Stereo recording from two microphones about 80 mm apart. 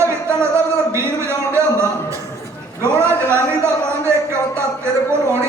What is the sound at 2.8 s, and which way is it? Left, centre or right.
Speech, right.